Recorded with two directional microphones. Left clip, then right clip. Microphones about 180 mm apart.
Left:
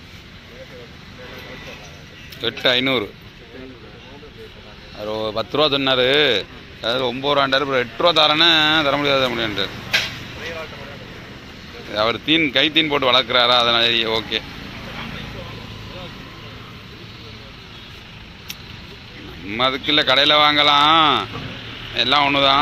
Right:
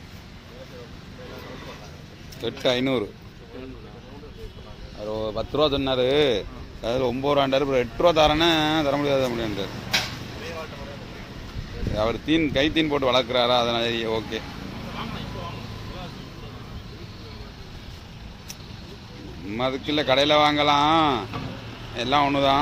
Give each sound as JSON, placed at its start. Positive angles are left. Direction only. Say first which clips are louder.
{"t": 2.4, "sound": "a man's voice", "louder": "left 6 dB", "side_deg": -10}
{"t": 5.2, "sound": "speech", "louder": "left 4 dB", "side_deg": 5}
{"t": 6.8, "sound": "a man's voice", "louder": "left 4 dB", "side_deg": -20}
{"t": 11.9, "sound": "a man's voice", "louder": "left 5 dB", "side_deg": -5}
{"t": 19.5, "sound": "a man's voice", "louder": "left 7 dB", "side_deg": -5}